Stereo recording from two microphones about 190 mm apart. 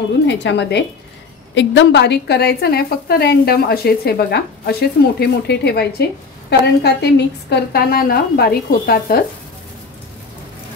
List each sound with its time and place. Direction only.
0.3 s speech: 65° left (ahead or behind)
1.5 s a woman's voice: 75° left (ahead or behind); by 9.2 s 55° left (ahead or behind)